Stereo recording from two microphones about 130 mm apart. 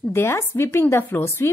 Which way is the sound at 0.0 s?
20° left (ahead or behind).